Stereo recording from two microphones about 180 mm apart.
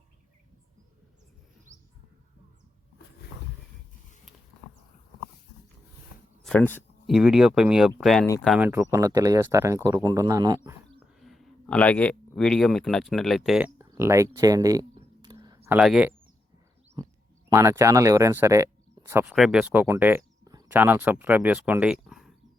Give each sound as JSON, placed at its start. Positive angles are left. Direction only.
{"t": 6.4, "sound": "speech", "side_deg": 5}
{"t": 7.1, "sound": "speech", "side_deg": -5}
{"t": 11.2, "sound": "speech", "side_deg": 0}
{"t": 15.2, "sound": "a sound", "side_deg": -20}
{"t": 15.8, "sound": "speech", "side_deg": -5}
{"t": 17.0, "sound": "a sound", "side_deg": -25}
{"t": 17.5, "sound": "speech", "side_deg": -15}
{"t": 19.2, "sound": "speech", "side_deg": -5}